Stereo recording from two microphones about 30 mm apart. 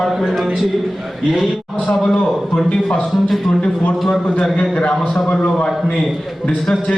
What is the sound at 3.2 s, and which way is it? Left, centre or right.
Speech, centre.